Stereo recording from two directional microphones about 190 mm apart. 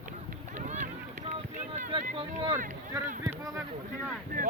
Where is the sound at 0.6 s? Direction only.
40° right (ahead or behind).